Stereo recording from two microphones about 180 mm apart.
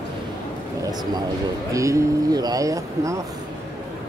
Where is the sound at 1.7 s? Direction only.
15° right (ahead or behind).